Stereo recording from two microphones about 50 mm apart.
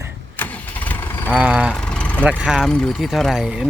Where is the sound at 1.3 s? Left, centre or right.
Right.